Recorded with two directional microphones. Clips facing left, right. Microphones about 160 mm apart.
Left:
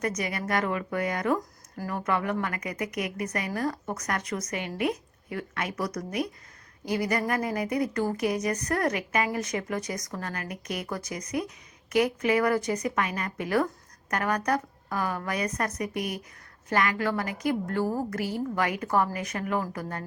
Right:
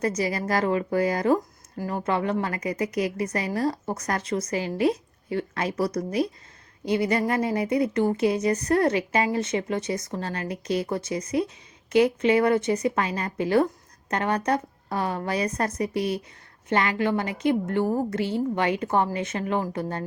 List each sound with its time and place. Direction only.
0.0 s a woman's voice: 30° right (ahead or behind)